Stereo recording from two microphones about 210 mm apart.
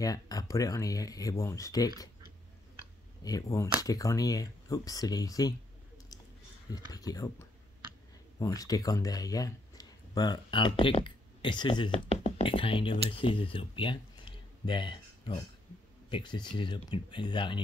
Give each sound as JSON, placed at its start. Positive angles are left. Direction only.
{"t": 0.0, "sound": "speech", "side_deg": 15}
{"t": 3.3, "sound": "speech", "side_deg": 15}
{"t": 6.7, "sound": "speech", "side_deg": 15}